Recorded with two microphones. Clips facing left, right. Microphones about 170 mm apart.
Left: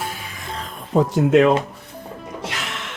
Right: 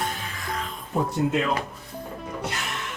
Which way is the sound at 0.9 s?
85° left.